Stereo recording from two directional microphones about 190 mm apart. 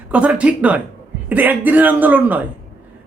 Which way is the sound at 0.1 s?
5° right (ahead or behind).